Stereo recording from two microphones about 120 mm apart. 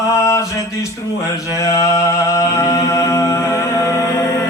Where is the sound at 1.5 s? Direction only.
30° left (ahead or behind).